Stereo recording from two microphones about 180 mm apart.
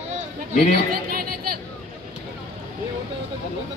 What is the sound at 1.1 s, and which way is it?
Chatter, 55° right (ahead or behind).